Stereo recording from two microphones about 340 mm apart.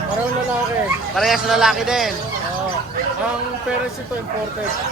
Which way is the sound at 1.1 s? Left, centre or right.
Centre.